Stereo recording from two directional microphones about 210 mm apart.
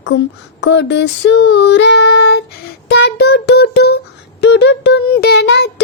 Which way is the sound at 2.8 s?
55° left (ahead or behind).